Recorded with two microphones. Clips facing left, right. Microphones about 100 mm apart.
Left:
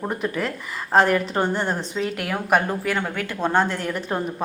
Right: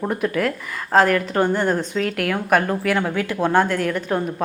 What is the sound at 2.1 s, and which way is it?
Speech, 15° left (ahead or behind).